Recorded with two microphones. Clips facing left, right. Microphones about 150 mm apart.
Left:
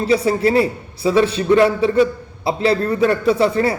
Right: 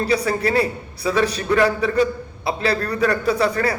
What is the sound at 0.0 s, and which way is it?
A man's voice, 25° left (ahead or behind).